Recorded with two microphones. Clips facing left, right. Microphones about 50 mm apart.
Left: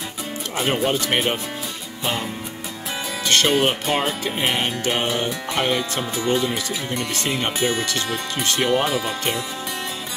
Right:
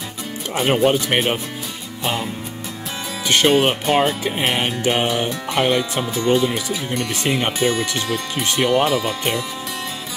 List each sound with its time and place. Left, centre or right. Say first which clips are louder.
0.6 s music: right 5 dB; centre
3.3 s music: right 3 dB; centre
6.2 s speech: right 4 dB; centre
7.2 s music: right 3 dB; centre
8.6 s speech: right 4 dB; centre